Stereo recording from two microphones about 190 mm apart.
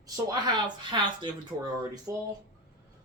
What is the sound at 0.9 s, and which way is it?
Speech, 25° right (ahead or behind).